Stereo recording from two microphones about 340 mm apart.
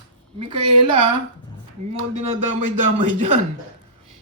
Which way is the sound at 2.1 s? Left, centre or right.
Right.